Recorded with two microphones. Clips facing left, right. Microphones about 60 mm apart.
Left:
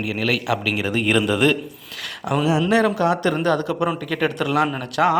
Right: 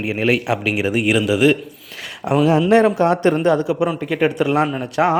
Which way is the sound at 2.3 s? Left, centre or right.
Right.